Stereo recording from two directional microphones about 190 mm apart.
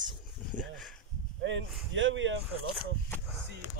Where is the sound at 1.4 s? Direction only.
80° right.